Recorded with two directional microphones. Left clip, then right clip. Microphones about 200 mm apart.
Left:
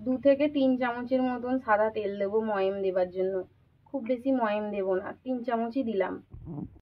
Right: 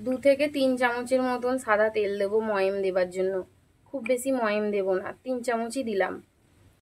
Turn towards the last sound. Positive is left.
turn(degrees=-35)  # may be behind; listen again after turning